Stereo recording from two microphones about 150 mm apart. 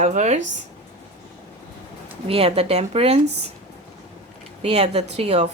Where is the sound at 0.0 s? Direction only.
55° right (ahead or behind).